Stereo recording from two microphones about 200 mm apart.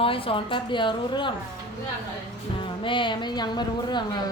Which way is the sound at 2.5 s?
25° left (ahead or behind).